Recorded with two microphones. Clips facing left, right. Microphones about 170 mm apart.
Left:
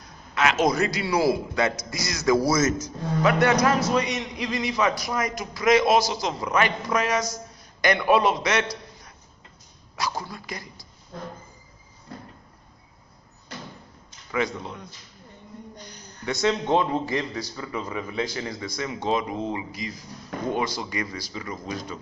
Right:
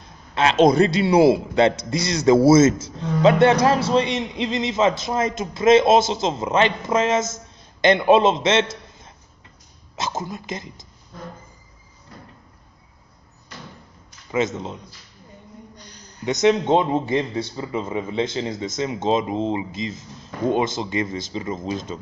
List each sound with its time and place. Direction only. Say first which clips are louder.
0.0 s a man's voice: right 3 dB; 30° right (ahead or behind)
14.3 s a man's voice: right 4 dB; 20° right (ahead or behind)
16.3 s a man's voice: right 6 dB; 20° right (ahead or behind)